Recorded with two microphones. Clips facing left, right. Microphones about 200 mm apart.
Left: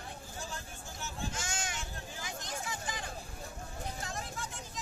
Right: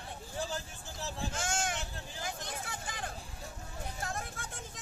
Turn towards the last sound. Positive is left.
turn(degrees=-55)  # may be behind; listen again after turning